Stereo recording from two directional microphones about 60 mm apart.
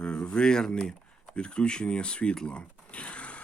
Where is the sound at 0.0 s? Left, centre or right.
Centre.